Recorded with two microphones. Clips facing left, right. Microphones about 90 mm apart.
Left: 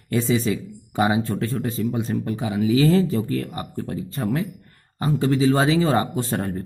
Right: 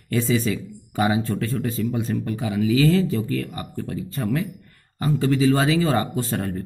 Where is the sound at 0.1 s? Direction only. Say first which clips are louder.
Left 1 dB; 25° left (ahead or behind).